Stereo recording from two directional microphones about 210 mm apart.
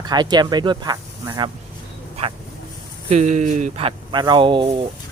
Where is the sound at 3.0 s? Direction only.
35° right (ahead or behind).